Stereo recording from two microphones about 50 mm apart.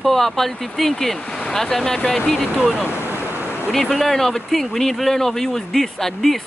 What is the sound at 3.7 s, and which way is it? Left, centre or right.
Speech, centre.